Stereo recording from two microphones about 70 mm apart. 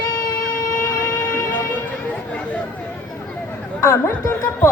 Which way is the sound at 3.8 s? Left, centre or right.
Left.